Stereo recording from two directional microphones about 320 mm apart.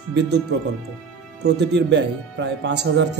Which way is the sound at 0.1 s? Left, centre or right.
Right.